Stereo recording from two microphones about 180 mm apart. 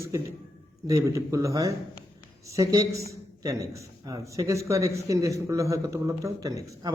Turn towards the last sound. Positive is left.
turn(degrees=-20)  # may be behind; listen again after turning